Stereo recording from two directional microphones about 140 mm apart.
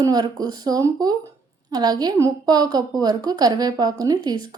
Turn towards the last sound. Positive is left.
turn(degrees=-30)  # may be behind; listen again after turning